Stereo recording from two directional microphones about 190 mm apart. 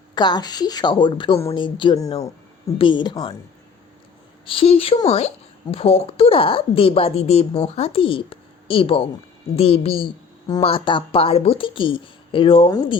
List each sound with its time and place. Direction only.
0.1 s a woman's voice: 20° left (ahead or behind)
4.4 s a woman's voice: 30° left (ahead or behind)